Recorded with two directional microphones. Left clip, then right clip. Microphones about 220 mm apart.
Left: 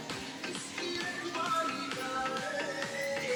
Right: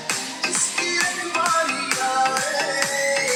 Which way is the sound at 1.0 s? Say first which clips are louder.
Right 13 dB; 40° right (ahead or behind).